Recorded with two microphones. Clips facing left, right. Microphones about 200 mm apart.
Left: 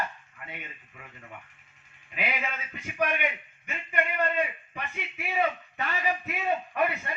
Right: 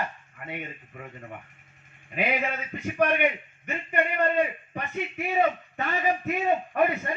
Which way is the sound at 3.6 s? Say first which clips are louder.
Right 4 dB; 35° right (ahead or behind).